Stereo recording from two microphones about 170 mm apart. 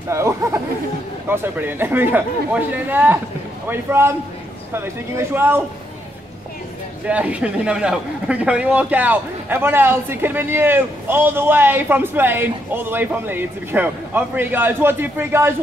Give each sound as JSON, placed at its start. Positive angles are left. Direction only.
{"t": 0.1, "sound": "a man's voice", "side_deg": -15}
{"t": 7.1, "sound": "a man's voice", "side_deg": -10}